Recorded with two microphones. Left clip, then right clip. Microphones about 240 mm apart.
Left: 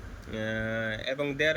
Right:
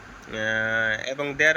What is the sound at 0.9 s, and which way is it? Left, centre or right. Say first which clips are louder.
Speech: right 3 dB; right.